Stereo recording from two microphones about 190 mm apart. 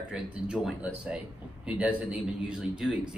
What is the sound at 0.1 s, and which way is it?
A man's voice, 5° right (ahead or behind).